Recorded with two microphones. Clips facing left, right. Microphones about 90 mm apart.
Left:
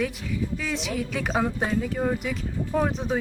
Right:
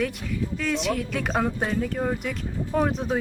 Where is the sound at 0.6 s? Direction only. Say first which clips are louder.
Right 3 dB; centre (ahead or behind).